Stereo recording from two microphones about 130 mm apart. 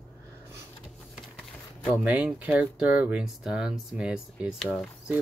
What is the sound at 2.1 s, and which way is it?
Speech, 10° right (ahead or behind).